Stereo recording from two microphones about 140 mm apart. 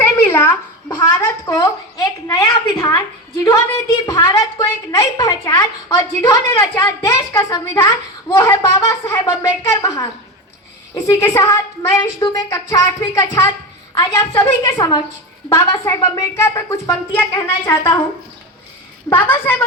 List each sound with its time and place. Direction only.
0.0 s a sound: 10° left (ahead or behind)
1.5 s a woman's voice: 25° left (ahead or behind)
16.1 s a woman's voice: 20° left (ahead or behind)
19.1 s a woman's voice: 15° left (ahead or behind)